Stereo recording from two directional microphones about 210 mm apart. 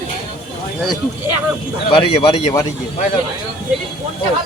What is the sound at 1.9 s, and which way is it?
Speech, 25° left (ahead or behind).